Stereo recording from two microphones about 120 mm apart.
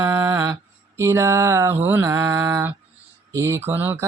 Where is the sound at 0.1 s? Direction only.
25° right (ahead or behind).